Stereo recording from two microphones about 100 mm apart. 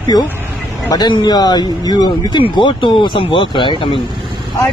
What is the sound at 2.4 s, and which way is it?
Speech, 55° left (ahead or behind).